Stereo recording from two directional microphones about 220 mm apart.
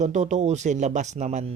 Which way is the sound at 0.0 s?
35° right (ahead or behind).